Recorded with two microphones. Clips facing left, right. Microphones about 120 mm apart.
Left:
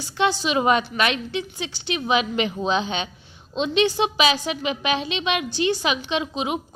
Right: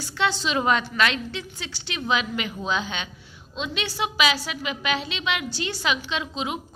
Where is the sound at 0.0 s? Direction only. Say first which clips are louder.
Left 3 dB; 15° left (ahead or behind).